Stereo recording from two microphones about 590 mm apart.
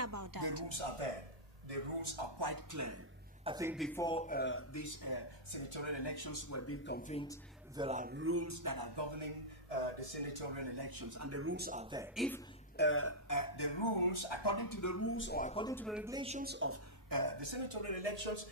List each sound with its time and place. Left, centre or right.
0.0 s a sound: right
1.7 s speech: right
3.4 s speech: centre; by 5.3 s left
5.5 s speech: left; by 7.3 s centre
7.7 s speech: centre; by 9.4 s right
9.7 s speech: right; by 12.4 s centre
12.7 s speech: centre
17.1 s speech: right